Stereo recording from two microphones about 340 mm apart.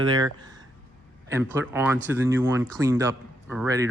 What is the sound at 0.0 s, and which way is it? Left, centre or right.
Speech, centre.